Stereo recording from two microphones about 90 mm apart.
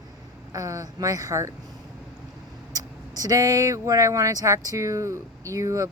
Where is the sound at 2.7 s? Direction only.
45° right (ahead or behind).